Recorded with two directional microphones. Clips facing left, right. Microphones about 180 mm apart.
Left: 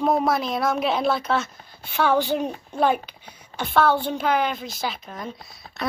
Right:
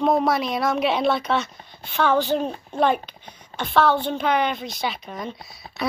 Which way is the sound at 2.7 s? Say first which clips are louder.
Right 1 dB; 5° left (ahead or behind).